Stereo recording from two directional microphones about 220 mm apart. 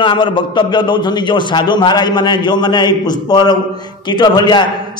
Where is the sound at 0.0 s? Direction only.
20° left (ahead or behind).